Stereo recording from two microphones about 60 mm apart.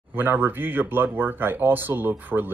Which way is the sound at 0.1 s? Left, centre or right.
Right.